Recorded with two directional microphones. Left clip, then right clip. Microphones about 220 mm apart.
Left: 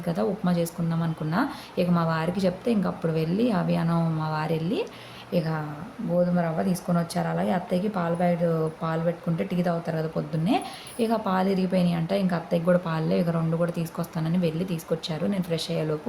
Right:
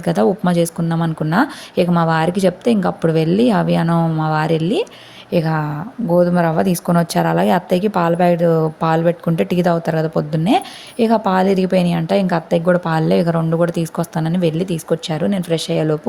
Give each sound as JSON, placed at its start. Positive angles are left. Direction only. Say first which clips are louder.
{"t": 0.0, "sound": "speech", "louder": "right 11 dB", "side_deg": -35}